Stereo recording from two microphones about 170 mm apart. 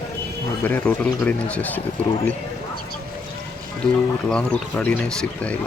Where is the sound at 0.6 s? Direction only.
10° left (ahead or behind).